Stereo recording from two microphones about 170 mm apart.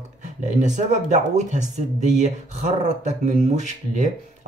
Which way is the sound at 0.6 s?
45° right (ahead or behind).